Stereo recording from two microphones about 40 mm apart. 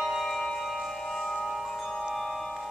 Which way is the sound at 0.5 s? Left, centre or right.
Centre.